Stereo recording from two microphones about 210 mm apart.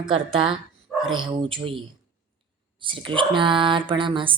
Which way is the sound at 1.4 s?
25° right (ahead or behind).